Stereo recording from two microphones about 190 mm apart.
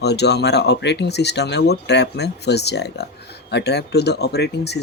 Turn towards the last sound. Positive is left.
turn(degrees=60)  # may be behind; listen again after turning